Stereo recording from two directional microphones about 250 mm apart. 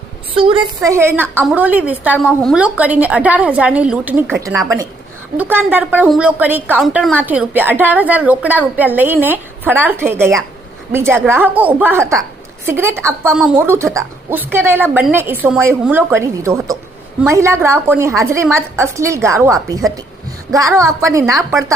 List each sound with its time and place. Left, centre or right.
0.3 s a sound: right
0.9 s a woman's voice: centre
5.4 s a woman's voice: centre